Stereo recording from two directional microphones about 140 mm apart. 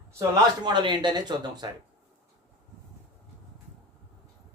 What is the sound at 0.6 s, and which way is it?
Speech, 35° right (ahead or behind).